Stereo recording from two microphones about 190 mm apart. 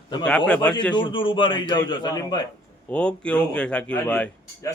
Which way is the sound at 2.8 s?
5° left (ahead or behind).